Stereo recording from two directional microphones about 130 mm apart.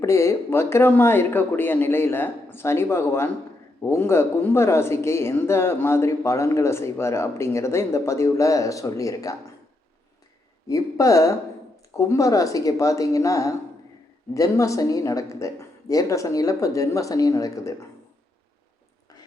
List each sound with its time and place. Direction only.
0.0 s speech: 20° left (ahead or behind)
10.7 s speech: 25° left (ahead or behind)